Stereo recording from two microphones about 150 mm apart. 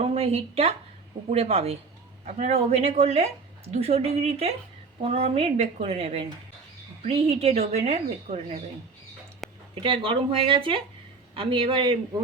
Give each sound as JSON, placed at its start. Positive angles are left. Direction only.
{"t": 0.0, "sound": "speech", "side_deg": -45}
{"t": 9.4, "sound": "a sound", "side_deg": 0}
{"t": 9.8, "sound": "speech", "side_deg": -35}